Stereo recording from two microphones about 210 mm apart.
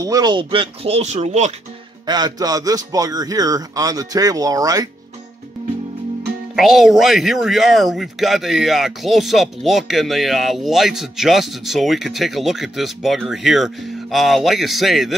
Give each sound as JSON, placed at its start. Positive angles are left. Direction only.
{"t": 0.0, "sound": "speech", "side_deg": -15}
{"t": 2.0, "sound": "speech", "side_deg": -20}
{"t": 6.5, "sound": "speech", "side_deg": 0}